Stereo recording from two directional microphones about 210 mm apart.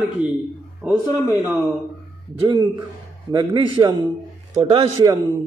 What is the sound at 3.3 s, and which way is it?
A man's voice, 20° right (ahead or behind).